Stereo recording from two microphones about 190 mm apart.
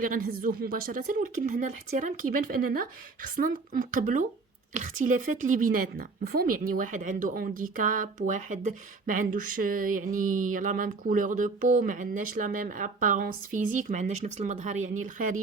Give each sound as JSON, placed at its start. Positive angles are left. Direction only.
{"t": 0.0, "sound": "a woman's voice", "side_deg": -50}